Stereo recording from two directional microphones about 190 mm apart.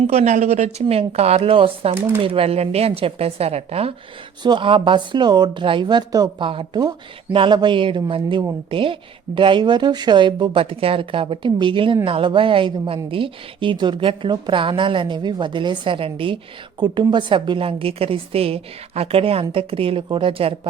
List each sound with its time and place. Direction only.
0.1 s speech: 35° right (ahead or behind)
2.0 s speech: 15° right (ahead or behind)
2.2 s speech: 30° right (ahead or behind)